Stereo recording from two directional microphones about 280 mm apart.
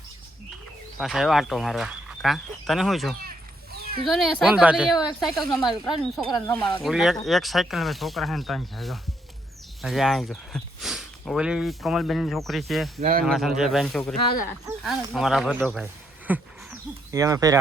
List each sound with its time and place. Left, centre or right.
0.9 s speech: centre
3.2 s a sound: right
4.0 s speech: centre
13.0 s speech: right
13.2 s speech: centre